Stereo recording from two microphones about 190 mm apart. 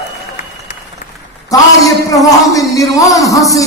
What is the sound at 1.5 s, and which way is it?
A man's voice, 20° left (ahead or behind).